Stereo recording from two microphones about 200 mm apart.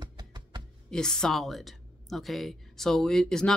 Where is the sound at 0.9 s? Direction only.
5° left (ahead or behind).